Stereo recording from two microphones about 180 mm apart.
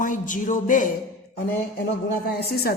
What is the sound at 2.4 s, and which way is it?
Speech, 60° left (ahead or behind).